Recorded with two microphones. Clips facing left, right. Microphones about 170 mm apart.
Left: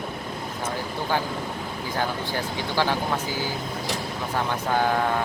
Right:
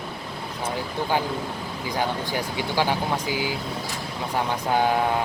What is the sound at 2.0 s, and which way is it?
Speech, 15° right (ahead or behind).